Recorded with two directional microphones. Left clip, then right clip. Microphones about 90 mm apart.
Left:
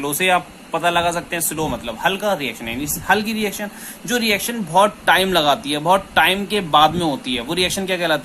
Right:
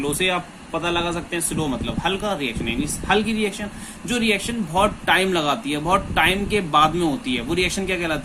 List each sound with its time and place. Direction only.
0.0 s speech: 40° left (ahead or behind)